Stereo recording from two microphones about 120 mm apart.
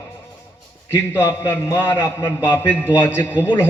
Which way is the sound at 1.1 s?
20° left (ahead or behind).